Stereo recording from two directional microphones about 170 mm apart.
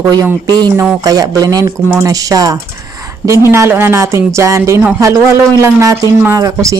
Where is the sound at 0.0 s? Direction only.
20° right (ahead or behind).